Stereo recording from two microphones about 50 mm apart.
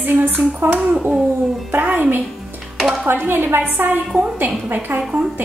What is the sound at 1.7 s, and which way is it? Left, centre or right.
Speech, right.